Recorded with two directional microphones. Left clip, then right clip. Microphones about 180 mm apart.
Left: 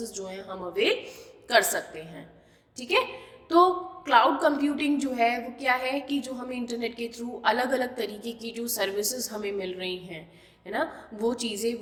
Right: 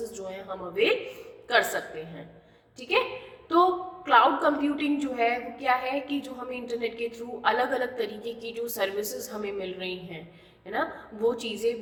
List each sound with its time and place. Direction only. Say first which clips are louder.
0.1 s a woman's voice: even; 40° left (ahead or behind)